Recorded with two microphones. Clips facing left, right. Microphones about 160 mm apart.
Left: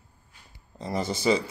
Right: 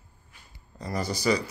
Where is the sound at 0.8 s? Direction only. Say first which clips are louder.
Left 2 dB; 25° left (ahead or behind).